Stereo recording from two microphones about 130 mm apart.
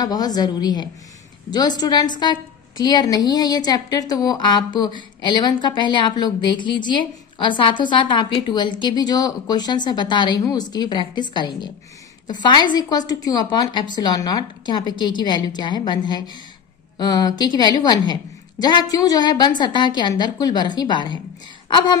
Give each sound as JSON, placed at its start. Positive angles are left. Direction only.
{"t": 0.0, "sound": "a woman's voice", "side_deg": 30}